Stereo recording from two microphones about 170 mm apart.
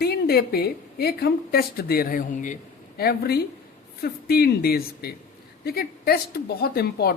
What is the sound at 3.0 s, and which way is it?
Speech, 65° left (ahead or behind).